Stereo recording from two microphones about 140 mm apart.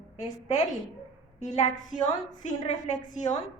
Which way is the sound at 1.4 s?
55° left (ahead or behind).